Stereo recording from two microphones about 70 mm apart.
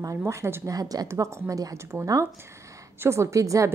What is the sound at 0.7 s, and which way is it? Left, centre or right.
Speech, right.